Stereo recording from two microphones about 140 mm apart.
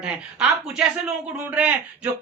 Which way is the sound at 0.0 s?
5° right (ahead or behind).